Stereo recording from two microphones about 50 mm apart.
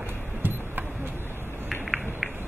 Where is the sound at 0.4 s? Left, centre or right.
Right.